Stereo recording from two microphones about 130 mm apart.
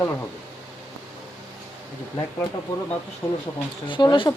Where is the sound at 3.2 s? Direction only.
20° left (ahead or behind).